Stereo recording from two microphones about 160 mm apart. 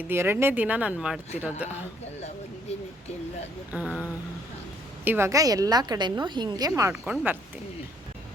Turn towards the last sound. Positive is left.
turn(degrees=-5)  # may be behind; listen again after turning